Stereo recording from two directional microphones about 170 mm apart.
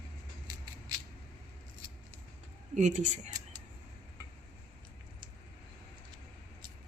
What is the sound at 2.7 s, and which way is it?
Speech, 45° right (ahead or behind).